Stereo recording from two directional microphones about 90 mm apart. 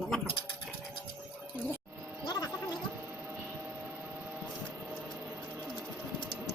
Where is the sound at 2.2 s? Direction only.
50° left (ahead or behind).